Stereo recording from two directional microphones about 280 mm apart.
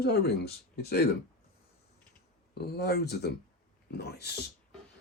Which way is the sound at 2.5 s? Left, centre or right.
Left.